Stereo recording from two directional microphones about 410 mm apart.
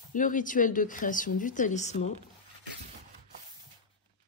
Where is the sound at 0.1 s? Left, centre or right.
Centre.